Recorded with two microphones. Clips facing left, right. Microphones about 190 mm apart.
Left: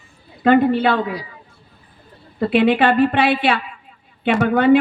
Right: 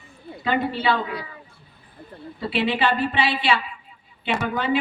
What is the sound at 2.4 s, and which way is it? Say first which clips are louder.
A woman's voice: left 8 dB; 55° left (ahead or behind).